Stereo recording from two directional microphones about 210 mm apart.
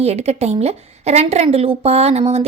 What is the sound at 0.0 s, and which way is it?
Speech, 30° right (ahead or behind).